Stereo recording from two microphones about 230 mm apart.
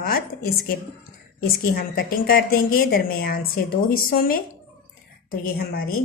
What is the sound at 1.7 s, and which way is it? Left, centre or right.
A woman's voice, left.